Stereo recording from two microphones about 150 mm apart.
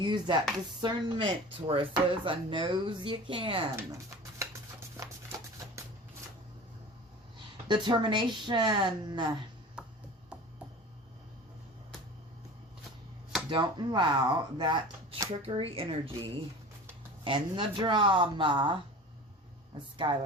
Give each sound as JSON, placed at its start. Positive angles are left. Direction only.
{"t": 0.0, "sound": "speech", "side_deg": -30}
{"t": 3.8, "sound": "speech", "side_deg": -20}
{"t": 7.3, "sound": "speech", "side_deg": -30}
{"t": 9.8, "sound": "music", "side_deg": -5}
{"t": 13.5, "sound": "speech", "side_deg": -30}
{"t": 20.0, "sound": "speech", "side_deg": -30}